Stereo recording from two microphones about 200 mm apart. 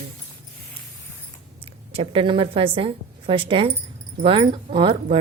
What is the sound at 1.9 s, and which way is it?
Speech, 25° right (ahead or behind).